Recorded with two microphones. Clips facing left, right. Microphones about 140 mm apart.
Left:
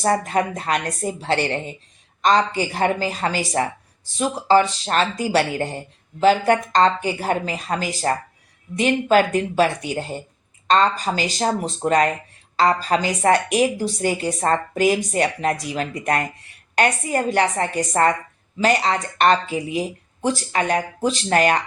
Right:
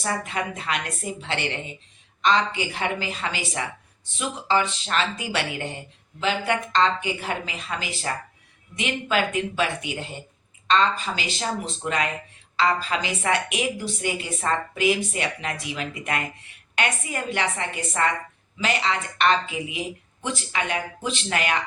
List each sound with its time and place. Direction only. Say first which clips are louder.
0.0 s a woman's voice: left 8 dB; 40° left (ahead or behind)